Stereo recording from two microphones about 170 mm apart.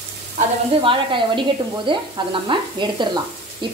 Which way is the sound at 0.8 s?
30° right (ahead or behind).